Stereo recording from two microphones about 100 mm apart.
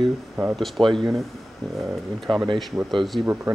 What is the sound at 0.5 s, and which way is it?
Speech, centre (ahead or behind).